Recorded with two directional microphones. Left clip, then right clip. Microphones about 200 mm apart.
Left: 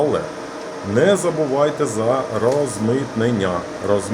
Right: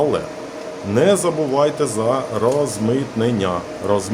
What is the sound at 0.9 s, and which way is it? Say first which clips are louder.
Speech: even; 10° right (ahead or behind).